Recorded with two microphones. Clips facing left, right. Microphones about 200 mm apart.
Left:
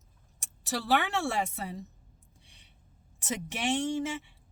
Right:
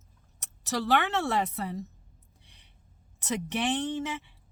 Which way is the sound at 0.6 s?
10° left (ahead or behind).